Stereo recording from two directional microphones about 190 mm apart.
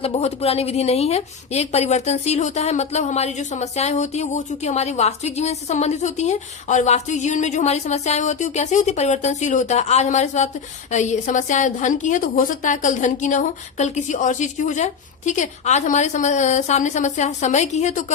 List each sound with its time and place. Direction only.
0.0 s a woman's voice: 35° left (ahead or behind)